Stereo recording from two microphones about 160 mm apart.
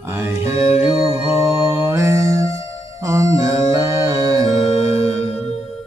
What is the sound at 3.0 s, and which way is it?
Music, 20° right (ahead or behind).